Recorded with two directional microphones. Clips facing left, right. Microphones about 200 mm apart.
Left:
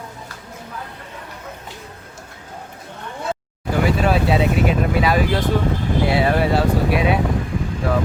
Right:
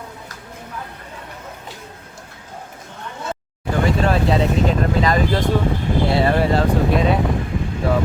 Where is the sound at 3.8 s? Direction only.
5° left (ahead or behind).